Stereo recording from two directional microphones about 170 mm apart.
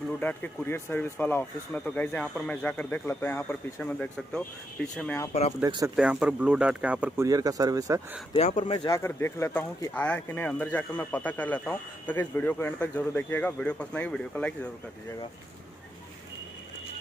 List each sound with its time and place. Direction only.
0.2 s speech: 10° left (ahead or behind)
5.6 s speech: 20° right (ahead or behind)
5.9 s speech: 5° right (ahead or behind)
7.2 s speech: 20° right (ahead or behind)
8.5 s speech: 30° left (ahead or behind)
8.9 s speech: 15° left (ahead or behind)